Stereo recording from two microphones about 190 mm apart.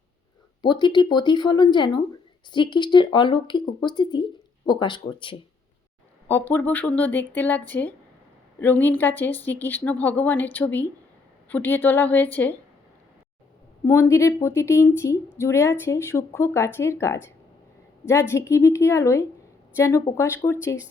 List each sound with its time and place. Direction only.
0.6 s speech: 25° left (ahead or behind)
6.2 s a woman's voice: 10° left (ahead or behind)
13.8 s a woman's voice: 15° left (ahead or behind)